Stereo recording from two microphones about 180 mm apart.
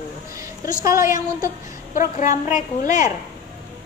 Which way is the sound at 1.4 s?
50° left (ahead or behind).